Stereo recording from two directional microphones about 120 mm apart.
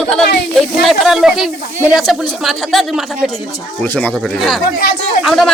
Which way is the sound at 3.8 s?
15° left (ahead or behind).